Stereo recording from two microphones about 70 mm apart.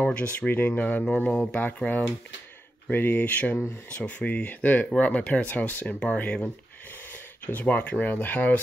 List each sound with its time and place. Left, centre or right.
0.0 s speech: centre
2.9 s speech: left